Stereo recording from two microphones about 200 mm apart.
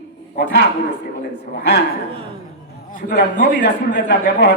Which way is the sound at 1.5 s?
55° left (ahead or behind).